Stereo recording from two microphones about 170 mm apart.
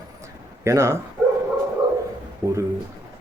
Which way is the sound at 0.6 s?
15° right (ahead or behind).